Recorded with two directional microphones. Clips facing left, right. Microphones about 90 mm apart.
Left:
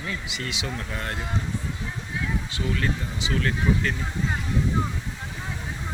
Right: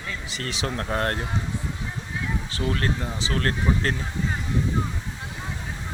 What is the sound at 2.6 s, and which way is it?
Speech, 50° right (ahead or behind).